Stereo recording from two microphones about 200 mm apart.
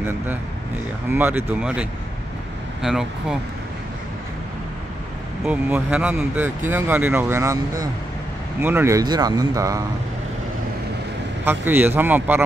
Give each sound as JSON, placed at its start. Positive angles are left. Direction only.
{"t": 1.1, "sound": "speech", "side_deg": -10}
{"t": 5.4, "sound": "speech", "side_deg": -5}
{"t": 11.4, "sound": "speech", "side_deg": -10}